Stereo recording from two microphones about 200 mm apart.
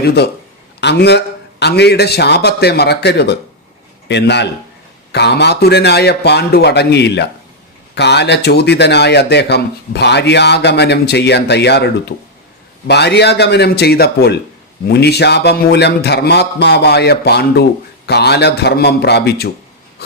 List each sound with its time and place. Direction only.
0.0 s a man's voice: 55° left (ahead or behind)